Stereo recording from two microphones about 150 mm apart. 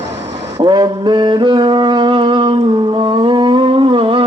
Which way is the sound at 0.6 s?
30° right (ahead or behind).